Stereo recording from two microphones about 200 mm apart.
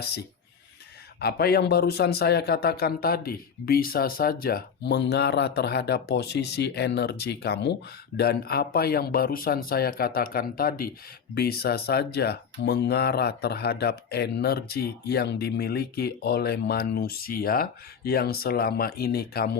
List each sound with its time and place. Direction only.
1.2 s speech: 50° left (ahead or behind)